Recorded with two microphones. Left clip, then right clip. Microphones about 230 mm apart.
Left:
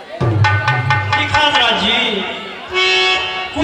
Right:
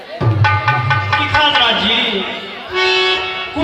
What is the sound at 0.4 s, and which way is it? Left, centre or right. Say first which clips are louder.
Music: right 1 dB; left.